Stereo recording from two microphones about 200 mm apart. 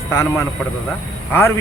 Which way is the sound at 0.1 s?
15° left (ahead or behind).